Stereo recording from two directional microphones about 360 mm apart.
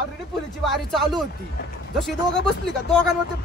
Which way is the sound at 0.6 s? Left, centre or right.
Centre.